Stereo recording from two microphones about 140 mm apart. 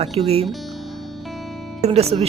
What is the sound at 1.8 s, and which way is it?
Speech, 45° right (ahead or behind).